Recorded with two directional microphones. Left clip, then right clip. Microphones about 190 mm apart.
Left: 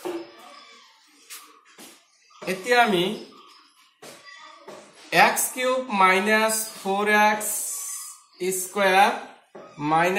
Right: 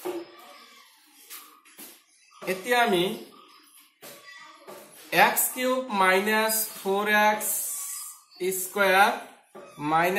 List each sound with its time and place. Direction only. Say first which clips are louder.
2.4 s speech: left 4 dB; 20° left (ahead or behind)
5.1 s speech: left 3 dB; 20° left (ahead or behind)
8.4 s speech: left 1 dB; 20° left (ahead or behind)